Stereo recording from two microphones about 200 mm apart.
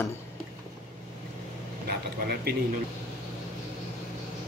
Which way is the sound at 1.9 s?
55° right (ahead or behind).